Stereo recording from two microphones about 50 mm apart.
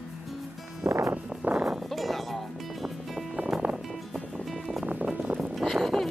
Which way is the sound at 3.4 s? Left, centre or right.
Right.